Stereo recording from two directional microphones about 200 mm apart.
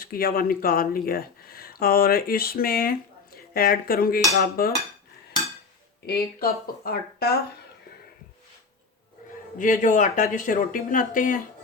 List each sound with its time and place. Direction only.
0.0 s speech: 50° left (ahead or behind)
6.1 s speech: 50° left (ahead or behind)
9.6 s a man's voice: 40° left (ahead or behind)